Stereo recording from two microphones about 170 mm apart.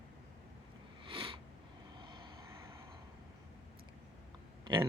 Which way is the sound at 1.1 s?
30° right (ahead or behind).